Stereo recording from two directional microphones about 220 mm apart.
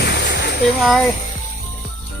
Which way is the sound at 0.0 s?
50° left (ahead or behind).